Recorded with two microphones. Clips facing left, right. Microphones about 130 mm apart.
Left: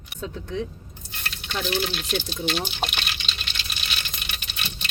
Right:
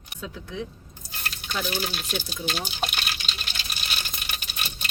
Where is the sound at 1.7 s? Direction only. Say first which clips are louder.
Left 4 dB; 10° right (ahead or behind).